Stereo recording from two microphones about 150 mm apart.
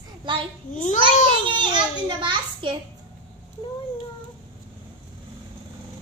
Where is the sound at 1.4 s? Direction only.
30° right (ahead or behind).